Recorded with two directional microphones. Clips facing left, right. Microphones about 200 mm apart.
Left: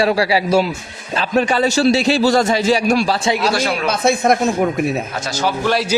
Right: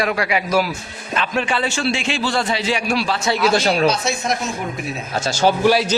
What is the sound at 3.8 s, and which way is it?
Speech, 55° left (ahead or behind).